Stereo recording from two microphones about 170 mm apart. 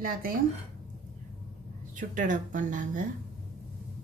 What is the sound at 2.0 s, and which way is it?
Speech, 50° right (ahead or behind).